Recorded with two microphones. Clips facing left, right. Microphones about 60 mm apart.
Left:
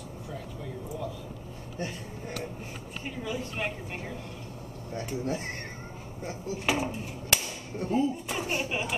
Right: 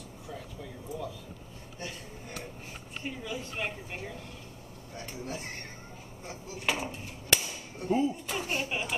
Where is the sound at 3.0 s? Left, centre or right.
Centre.